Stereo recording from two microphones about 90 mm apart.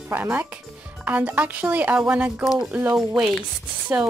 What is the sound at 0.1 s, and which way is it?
A woman's voice, 20° right (ahead or behind).